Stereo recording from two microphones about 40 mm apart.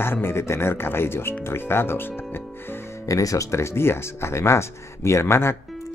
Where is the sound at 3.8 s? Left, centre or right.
Left.